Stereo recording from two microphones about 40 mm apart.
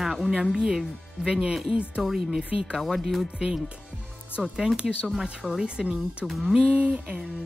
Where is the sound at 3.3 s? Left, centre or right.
Centre.